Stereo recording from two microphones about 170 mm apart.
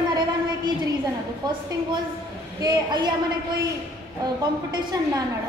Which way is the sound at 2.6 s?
25° right (ahead or behind).